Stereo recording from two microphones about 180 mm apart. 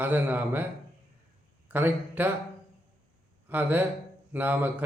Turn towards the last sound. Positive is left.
turn(degrees=-10)  # may be behind; listen again after turning